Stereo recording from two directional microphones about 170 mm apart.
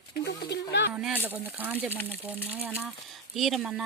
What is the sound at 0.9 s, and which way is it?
Speech, 5° right (ahead or behind).